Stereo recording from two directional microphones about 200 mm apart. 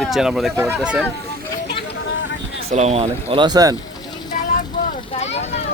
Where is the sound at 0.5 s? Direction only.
10° right (ahead or behind).